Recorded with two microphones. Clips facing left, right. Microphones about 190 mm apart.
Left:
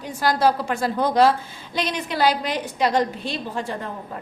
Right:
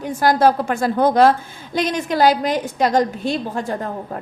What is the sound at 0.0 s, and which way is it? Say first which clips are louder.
A woman's voice: right 5 dB; 50° right (ahead or behind).